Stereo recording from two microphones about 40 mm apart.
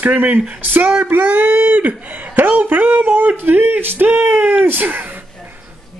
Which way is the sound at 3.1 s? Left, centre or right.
Right.